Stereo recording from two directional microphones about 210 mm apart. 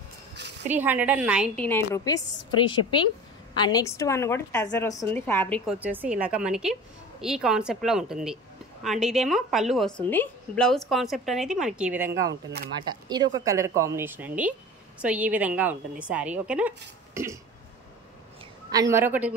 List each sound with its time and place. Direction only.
0.7 s speech: 10° right (ahead or behind)
1.6 s a woman's voice: 10° left (ahead or behind)
5.7 s a woman's voice: 10° right (ahead or behind)
13.1 s speech: 20° right (ahead or behind)
18.7 s speech: 15° right (ahead or behind)